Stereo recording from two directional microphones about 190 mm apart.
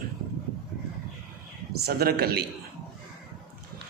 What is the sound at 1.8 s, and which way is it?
Speech, 55° right (ahead or behind).